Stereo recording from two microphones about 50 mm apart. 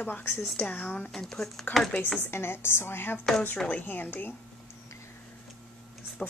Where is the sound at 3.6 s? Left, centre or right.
Left.